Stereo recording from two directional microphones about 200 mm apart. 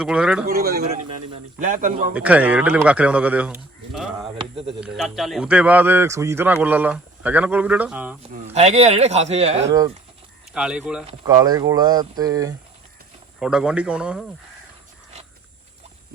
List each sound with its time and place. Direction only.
0.0 s speech: 5° right (ahead or behind)
0.4 s speech: 50° right (ahead or behind)
0.9 s speech: 35° right (ahead or behind)
2.1 s a man's voice: 5° right (ahead or behind)
8.5 s speech: 35° right (ahead or behind)
10.5 s speech: 5° right (ahead or behind)
11.3 s speech: 20° right (ahead or behind)
13.4 s speech: 5° right (ahead or behind)